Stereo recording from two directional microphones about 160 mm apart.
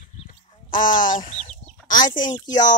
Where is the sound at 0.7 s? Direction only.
55° left (ahead or behind).